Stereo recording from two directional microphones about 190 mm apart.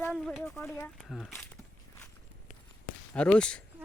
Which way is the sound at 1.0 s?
Centre (ahead or behind).